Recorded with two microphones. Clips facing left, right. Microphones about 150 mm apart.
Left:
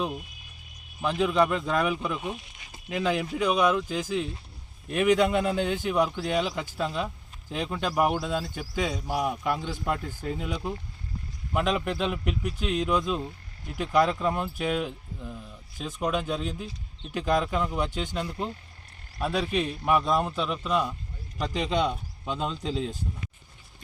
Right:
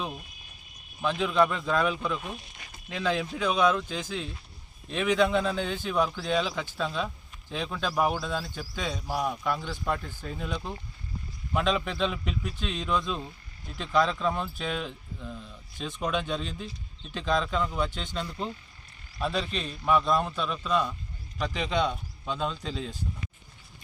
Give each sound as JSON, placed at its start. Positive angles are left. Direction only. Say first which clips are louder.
{"t": 1.0, "sound": "speech", "louder": "left 1 dB", "side_deg": 15}